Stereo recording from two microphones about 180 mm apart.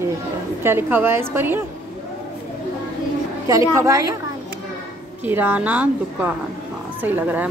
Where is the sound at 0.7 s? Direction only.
10° right (ahead or behind).